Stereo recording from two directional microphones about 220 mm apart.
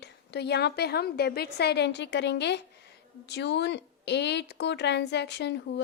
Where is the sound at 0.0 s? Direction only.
50° left (ahead or behind).